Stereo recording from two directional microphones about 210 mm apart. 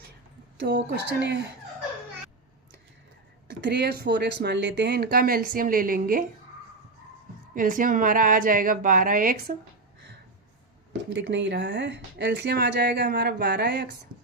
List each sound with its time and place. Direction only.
0.6 s speech: 55° right (ahead or behind)
3.6 s speech: 50° right (ahead or behind)
7.5 s a woman's voice: 40° right (ahead or behind)
11.1 s speech: 60° right (ahead or behind)